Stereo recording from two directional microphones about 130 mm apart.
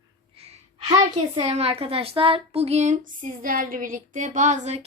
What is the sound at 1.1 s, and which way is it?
A woman's voice, 50° right (ahead or behind).